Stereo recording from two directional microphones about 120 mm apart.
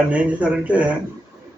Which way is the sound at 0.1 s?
10° right (ahead or behind).